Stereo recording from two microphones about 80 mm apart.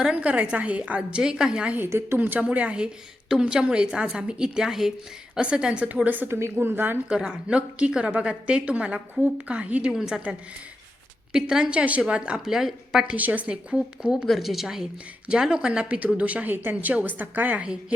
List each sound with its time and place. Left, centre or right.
0.0 s a woman's voice: centre
1.9 s a woman's voice: right
2.2 s a woman's voice: centre
7.1 s a woman's voice: centre
11.3 s a woman's voice: centre
13.1 s a woman's voice: centre